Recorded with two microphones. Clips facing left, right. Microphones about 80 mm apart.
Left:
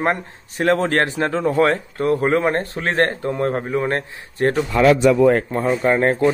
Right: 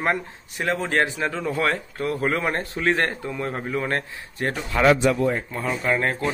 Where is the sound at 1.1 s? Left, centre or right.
Left.